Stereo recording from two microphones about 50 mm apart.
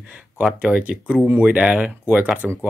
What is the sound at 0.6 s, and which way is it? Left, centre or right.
Speech, right.